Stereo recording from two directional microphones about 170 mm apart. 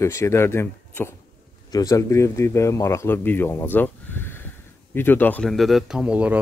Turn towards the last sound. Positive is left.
turn(degrees=-5)  # may be behind; listen again after turning